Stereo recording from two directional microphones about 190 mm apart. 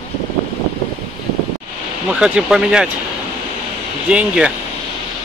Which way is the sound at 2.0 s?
5° right (ahead or behind).